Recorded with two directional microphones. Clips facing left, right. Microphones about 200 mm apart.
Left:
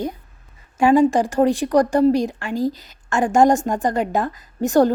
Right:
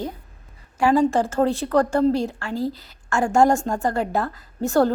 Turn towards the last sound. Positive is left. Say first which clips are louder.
# left 3 dB
turn(degrees=15)  # may be behind; listen again after turning